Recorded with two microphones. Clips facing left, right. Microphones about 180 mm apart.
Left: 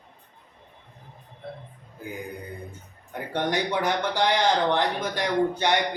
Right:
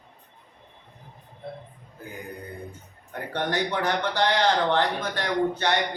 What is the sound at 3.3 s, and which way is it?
Speech, 15° left (ahead or behind).